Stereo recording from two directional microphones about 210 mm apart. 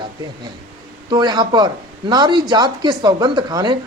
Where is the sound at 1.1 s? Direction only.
20° right (ahead or behind).